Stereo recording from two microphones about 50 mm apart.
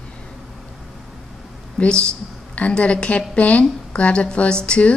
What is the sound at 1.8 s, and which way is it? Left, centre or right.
A woman's voice, centre.